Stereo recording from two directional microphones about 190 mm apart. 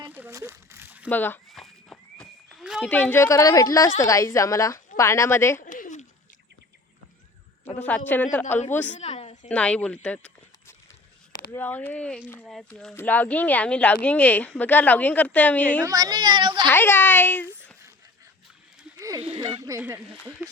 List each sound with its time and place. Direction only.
0.0 s a sound: 10° right (ahead or behind)
1.1 s speech: 10° left (ahead or behind)
1.5 s walk: centre (ahead or behind)
2.9 s speech: 10° left (ahead or behind)
5.6 s a sound: 45° left (ahead or behind)
7.8 s speech: 10° left (ahead or behind)
8.9 s a sound: 35° left (ahead or behind)
9.5 s speech: 5° left (ahead or behind)
15.8 s a woman's voice: 20° right (ahead or behind)
16.6 s speech: 10° left (ahead or behind)
18.9 s a sound: 20° right (ahead or behind)
19.3 s a woman's voice: 30° right (ahead or behind)
19.6 s speech: 15° right (ahead or behind)